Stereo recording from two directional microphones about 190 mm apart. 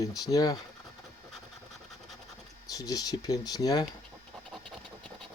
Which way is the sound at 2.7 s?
20° left (ahead or behind).